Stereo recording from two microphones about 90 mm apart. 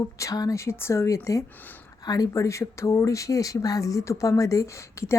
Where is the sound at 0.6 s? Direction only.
30° left (ahead or behind).